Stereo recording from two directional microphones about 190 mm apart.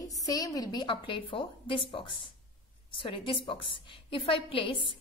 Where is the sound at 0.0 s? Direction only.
20° left (ahead or behind).